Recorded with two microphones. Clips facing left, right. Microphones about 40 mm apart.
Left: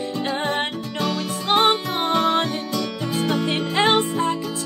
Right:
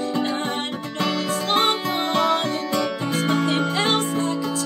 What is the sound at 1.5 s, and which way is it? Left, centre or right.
Music, left.